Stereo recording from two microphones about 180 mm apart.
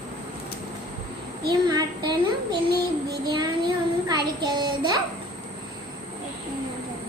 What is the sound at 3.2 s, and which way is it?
Child singing, 25° right (ahead or behind).